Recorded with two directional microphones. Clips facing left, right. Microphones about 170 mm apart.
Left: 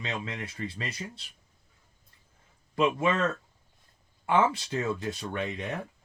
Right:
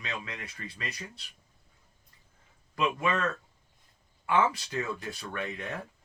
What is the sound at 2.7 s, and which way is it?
Speech, 25° left (ahead or behind).